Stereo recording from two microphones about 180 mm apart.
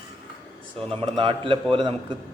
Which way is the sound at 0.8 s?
30° right (ahead or behind).